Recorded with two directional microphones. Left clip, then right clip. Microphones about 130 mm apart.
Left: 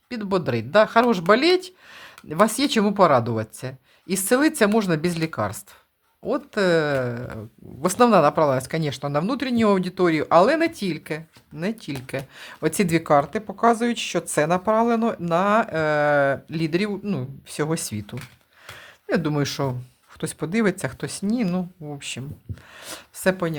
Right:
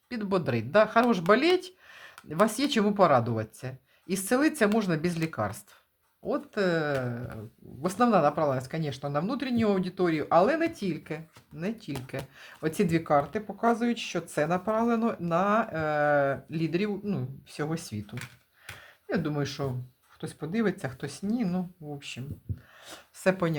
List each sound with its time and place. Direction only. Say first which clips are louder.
0.1 s speech: left 5 dB; 25° left (ahead or behind); by 22.2 s 50° left (ahead or behind)
22.8 s a sound: left 10 dB; 40° left (ahead or behind)
23.2 s speech: left 4 dB; 10° left (ahead or behind)